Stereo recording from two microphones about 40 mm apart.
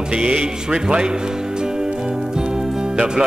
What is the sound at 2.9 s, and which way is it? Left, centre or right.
Speech, right.